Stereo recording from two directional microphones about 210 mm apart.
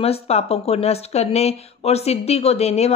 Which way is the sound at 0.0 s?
30° left (ahead or behind).